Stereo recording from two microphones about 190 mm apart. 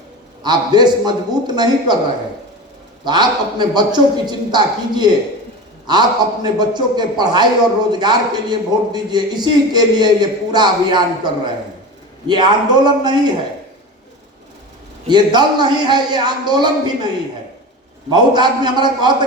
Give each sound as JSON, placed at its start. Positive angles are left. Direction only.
{"t": 0.4, "sound": "a man's voice", "side_deg": -20}
{"t": 3.0, "sound": "a man's voice", "side_deg": -20}
{"t": 15.0, "sound": "a man's voice", "side_deg": -20}
{"t": 18.1, "sound": "a man's voice", "side_deg": -20}